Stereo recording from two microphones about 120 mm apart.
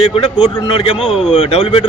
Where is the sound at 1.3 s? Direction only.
55° left (ahead or behind).